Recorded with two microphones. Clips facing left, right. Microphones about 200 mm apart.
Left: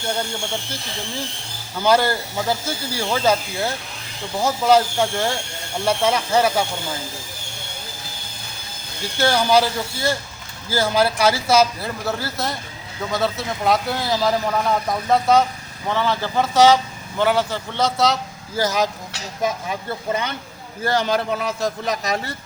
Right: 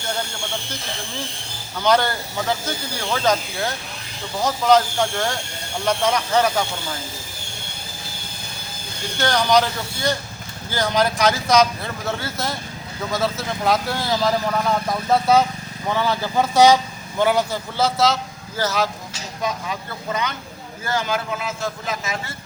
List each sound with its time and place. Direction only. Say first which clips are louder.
1.8 s speech: left 1 dB; 10° left (ahead or behind)
9.2 s speech: left 1 dB; 5° left (ahead or behind)
18.5 s speech: left 2 dB; 15° left (ahead or behind)
19.9 s a man's voice: left 3 dB; 30° left (ahead or behind)